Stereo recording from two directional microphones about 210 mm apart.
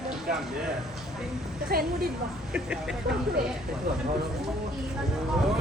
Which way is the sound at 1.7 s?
45° right (ahead or behind).